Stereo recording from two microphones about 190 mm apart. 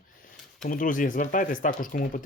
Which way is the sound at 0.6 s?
45° left (ahead or behind).